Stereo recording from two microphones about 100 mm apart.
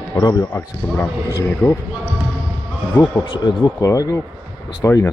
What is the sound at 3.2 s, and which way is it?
Speech, 10° left (ahead or behind).